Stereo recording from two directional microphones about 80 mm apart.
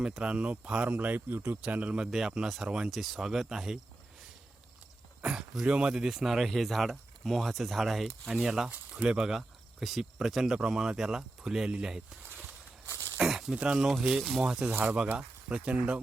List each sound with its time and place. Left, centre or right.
0.0 s speech: centre
2.0 s speech: centre
5.2 s speech: centre
12.9 s a sound: right
13.2 s a sound: centre
13.6 s speech: centre
14.7 s speech: right